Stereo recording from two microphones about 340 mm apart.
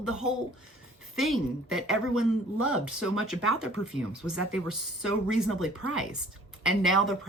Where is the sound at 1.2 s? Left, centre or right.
Centre.